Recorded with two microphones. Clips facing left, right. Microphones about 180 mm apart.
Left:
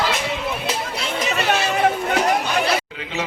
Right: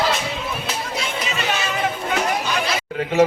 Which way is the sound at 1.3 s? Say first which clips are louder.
Left 5 dB; 65° left (ahead or behind).